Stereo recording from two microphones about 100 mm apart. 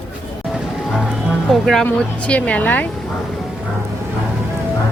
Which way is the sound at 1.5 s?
5° left (ahead or behind).